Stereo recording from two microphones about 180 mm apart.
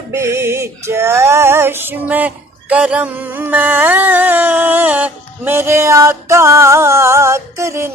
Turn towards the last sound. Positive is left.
turn(degrees=-15)  # may be behind; listen again after turning